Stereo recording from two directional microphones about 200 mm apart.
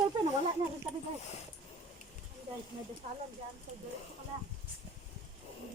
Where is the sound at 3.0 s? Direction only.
35° right (ahead or behind).